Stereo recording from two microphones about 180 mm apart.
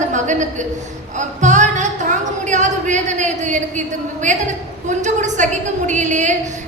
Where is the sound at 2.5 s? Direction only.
40° right (ahead or behind).